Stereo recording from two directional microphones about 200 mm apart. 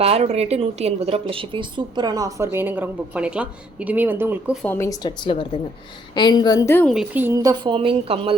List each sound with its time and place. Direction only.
0.0 s a woman's voice: 30° right (ahead or behind); by 4.5 s 10° right (ahead or behind)
4.6 s a woman's voice: 10° left (ahead or behind)
6.8 s a woman's voice: 5° right (ahead or behind); by 8.3 s 30° right (ahead or behind)